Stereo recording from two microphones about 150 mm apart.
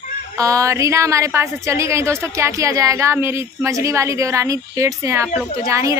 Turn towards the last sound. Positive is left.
turn(degrees=-20)  # may be behind; listen again after turning